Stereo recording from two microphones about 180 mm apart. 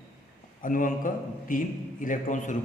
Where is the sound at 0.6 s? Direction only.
50° left (ahead or behind).